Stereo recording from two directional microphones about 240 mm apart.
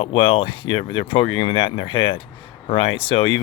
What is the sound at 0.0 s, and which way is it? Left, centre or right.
Speech, left.